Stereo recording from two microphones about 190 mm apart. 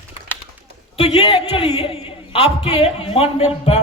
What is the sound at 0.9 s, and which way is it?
A man's voice, 30° left (ahead or behind).